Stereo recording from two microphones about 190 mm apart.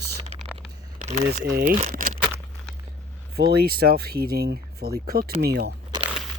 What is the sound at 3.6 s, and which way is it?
Speech, 55° right (ahead or behind).